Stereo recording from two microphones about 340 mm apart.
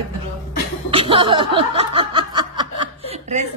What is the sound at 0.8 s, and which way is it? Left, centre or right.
Snicker, centre.